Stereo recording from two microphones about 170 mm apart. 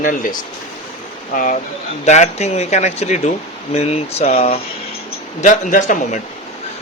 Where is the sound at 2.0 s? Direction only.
40° left (ahead or behind).